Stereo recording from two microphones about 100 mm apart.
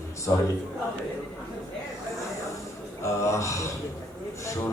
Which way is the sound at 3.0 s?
30° left (ahead or behind).